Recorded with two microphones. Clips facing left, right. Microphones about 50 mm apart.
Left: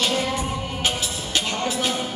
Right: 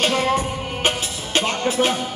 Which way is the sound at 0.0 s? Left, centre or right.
Right.